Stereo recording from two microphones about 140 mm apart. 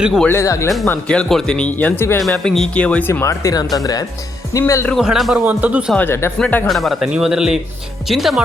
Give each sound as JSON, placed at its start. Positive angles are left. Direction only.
{"t": 0.0, "sound": "a man's voice", "side_deg": 0}
{"t": 0.3, "sound": "speech", "side_deg": 20}
{"t": 0.9, "sound": "speech", "side_deg": 10}
{"t": 2.2, "sound": "speech", "side_deg": 5}
{"t": 4.9, "sound": "a man's voice", "side_deg": 0}
{"t": 5.9, "sound": "speech", "side_deg": 15}
{"t": 6.7, "sound": "a man's voice", "side_deg": 0}